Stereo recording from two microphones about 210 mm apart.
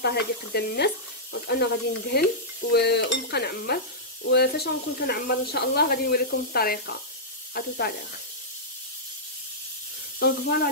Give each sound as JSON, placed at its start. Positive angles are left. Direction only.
{"t": 0.0, "sound": "sizzle", "side_deg": 50}
{"t": 10.1, "sound": "sizzle", "side_deg": 50}